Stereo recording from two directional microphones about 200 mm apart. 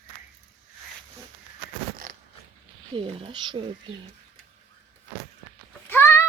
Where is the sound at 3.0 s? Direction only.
25° right (ahead or behind).